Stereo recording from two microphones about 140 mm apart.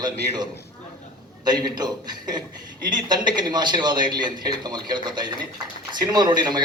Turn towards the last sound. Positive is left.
turn(degrees=-30)  # may be behind; listen again after turning